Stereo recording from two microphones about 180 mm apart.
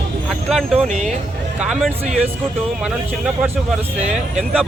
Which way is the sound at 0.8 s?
40° right (ahead or behind).